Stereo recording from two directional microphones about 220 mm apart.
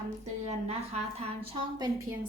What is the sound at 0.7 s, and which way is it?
A woman's voice, 30° right (ahead or behind).